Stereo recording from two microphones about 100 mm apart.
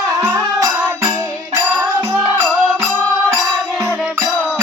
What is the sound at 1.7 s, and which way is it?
Music, 15° right (ahead or behind).